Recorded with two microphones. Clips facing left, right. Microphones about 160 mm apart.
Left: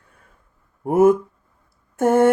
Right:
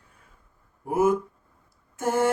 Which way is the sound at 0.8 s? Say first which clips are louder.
Left 8 dB; 55° left (ahead or behind).